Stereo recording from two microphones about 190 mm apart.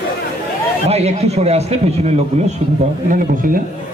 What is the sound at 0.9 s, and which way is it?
Speech, 35° right (ahead or behind).